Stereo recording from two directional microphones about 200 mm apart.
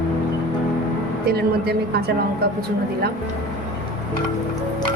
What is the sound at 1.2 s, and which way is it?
Speech, 50° right (ahead or behind).